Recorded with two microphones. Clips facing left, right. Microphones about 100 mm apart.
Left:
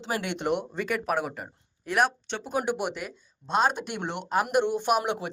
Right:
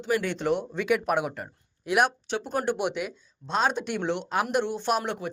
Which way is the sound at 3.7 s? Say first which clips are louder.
Right 4 dB; 50° left (ahead or behind).